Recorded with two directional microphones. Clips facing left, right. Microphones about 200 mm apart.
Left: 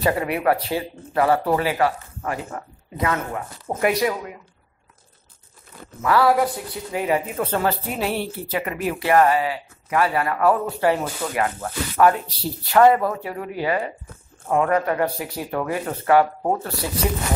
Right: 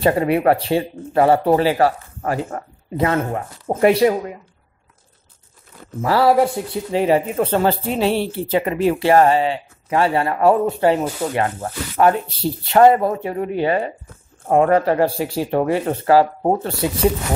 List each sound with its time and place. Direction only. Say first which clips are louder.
0.0 s speech: right 5 dB; 30° right (ahead or behind)
5.9 s speech: right 3 dB; 30° right (ahead or behind)